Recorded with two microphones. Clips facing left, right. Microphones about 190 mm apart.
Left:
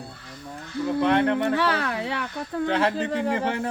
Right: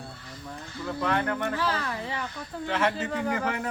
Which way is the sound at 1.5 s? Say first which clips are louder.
Left 5 dB; 70° left (ahead or behind).